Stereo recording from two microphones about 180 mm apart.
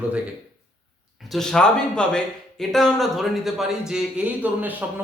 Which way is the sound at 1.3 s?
5° left (ahead or behind).